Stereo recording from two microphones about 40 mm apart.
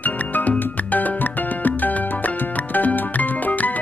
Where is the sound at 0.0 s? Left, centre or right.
Left.